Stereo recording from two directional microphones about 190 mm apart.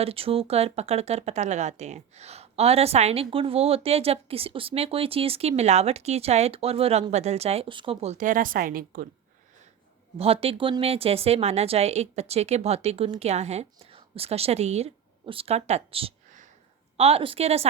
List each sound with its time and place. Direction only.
0.0 s speech: 30° right (ahead or behind); by 9.0 s 50° right (ahead or behind)
10.2 s speech: 30° right (ahead or behind)